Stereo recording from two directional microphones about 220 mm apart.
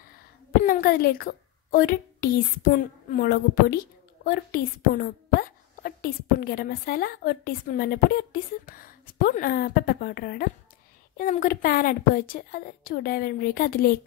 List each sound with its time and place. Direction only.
0.6 s a woman's voice: 40° left (ahead or behind)